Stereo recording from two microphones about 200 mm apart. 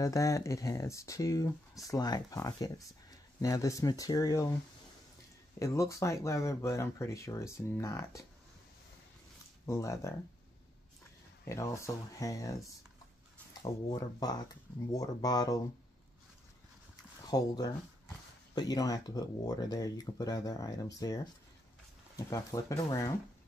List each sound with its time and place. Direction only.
0.0 s speech: 15° left (ahead or behind)
5.6 s speech: 15° left (ahead or behind)
9.7 s speech: 15° left (ahead or behind)
11.4 s speech: 15° left (ahead or behind)
17.3 s speech: 20° left (ahead or behind)